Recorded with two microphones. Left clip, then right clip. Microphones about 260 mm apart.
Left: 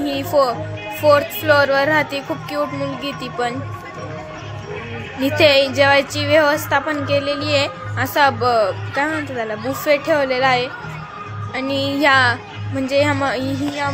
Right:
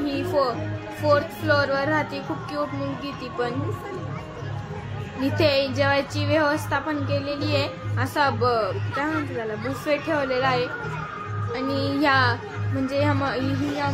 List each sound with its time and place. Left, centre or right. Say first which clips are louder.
0.0 s music: left 6 dB; centre
1.0 s a woman's voice: left 7 dB; centre
5.2 s a woman's voice: left 8 dB; centre